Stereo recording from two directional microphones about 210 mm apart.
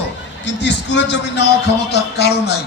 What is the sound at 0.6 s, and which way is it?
A man's voice, 55° left (ahead or behind).